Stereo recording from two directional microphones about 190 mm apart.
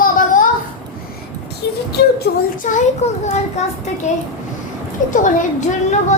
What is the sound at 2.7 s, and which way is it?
A woman's voice, 35° left (ahead or behind).